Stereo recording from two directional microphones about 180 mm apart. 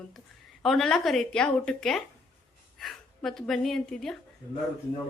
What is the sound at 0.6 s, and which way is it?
A woman's voice, centre (ahead or behind).